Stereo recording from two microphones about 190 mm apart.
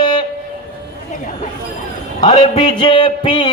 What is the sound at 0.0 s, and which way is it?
Train, 25° left (ahead or behind).